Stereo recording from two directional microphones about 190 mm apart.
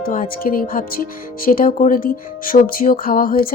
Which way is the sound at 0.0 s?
50° left (ahead or behind).